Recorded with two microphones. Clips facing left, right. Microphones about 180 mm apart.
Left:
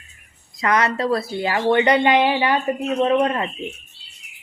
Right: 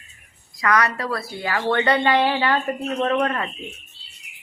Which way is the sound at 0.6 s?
25° left (ahead or behind).